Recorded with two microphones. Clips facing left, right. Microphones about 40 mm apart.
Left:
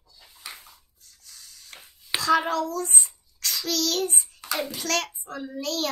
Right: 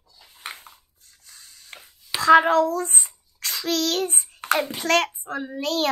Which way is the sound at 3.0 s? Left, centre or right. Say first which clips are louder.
Even; right.